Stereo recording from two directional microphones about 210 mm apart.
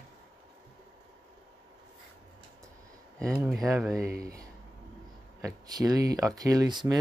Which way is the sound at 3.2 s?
Centre (ahead or behind).